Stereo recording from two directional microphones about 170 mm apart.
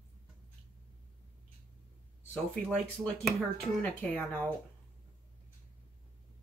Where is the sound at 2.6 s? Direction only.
5° left (ahead or behind).